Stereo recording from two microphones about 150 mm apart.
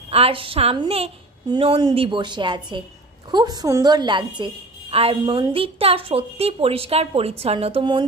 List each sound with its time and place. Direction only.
0.1 s a woman's voice: 40° right (ahead or behind)